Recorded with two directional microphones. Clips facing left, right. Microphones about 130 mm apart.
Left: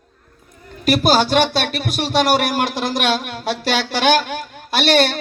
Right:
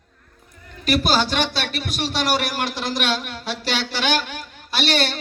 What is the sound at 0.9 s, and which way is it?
Speech, 45° left (ahead or behind).